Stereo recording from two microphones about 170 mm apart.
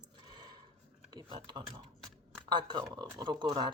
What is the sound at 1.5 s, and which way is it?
Speech, 25° right (ahead or behind).